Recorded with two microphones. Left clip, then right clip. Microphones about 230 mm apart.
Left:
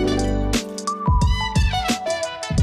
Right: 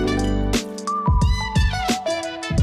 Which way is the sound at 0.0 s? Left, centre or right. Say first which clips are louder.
Left 1 dB; centre.